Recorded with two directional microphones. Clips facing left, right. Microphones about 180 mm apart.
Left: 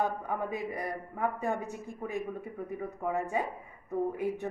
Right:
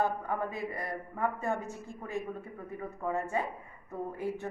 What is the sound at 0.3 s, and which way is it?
A man's voice, 15° left (ahead or behind).